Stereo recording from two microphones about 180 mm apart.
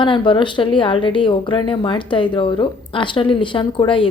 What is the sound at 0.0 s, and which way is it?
A woman's voice, 25° left (ahead or behind).